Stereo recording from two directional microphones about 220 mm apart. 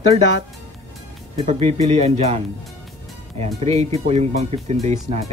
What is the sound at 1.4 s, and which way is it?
Speech, 30° right (ahead or behind).